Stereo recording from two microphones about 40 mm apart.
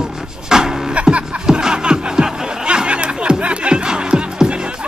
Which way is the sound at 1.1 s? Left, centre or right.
Right.